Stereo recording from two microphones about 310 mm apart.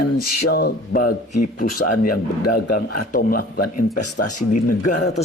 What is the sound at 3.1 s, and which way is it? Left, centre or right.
Speech, left.